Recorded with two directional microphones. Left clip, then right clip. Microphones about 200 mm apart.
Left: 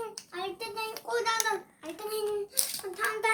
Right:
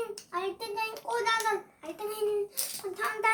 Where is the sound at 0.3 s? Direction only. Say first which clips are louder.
Right 3 dB; 25° right (ahead or behind).